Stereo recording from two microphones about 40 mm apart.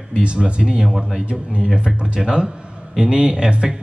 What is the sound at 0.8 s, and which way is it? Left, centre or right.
Speech, centre.